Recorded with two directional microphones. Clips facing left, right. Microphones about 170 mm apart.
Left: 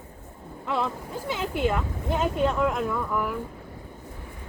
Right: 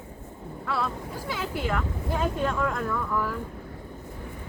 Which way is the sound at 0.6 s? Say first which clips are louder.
Left 2 dB; 20° left (ahead or behind).